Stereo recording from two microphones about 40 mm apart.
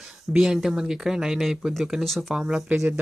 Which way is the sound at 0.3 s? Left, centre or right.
Centre.